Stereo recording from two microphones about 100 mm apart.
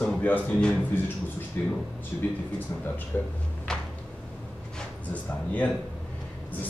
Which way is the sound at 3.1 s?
20° left (ahead or behind).